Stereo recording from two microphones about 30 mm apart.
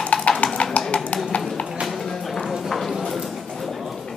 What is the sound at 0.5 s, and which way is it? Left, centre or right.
Clip-clop, left.